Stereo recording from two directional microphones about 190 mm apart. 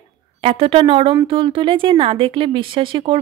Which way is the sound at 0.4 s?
30° right (ahead or behind).